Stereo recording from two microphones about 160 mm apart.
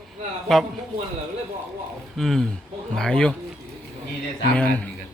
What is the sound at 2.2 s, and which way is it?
Speech, centre (ahead or behind).